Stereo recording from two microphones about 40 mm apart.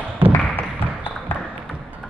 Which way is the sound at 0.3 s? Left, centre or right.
Left.